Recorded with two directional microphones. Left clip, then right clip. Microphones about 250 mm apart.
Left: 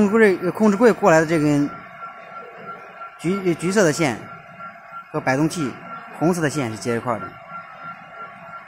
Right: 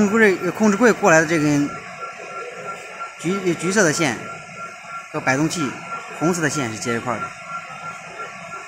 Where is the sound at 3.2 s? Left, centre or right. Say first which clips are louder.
Even; left.